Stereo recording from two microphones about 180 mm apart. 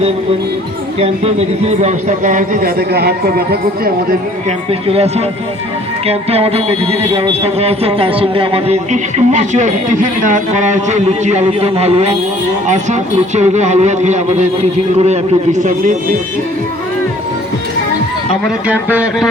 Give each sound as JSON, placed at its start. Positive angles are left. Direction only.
{"t": 0.9, "sound": "a man's voice", "side_deg": -35}
{"t": 4.4, "sound": "speech", "side_deg": -35}
{"t": 18.4, "sound": "speech", "side_deg": -10}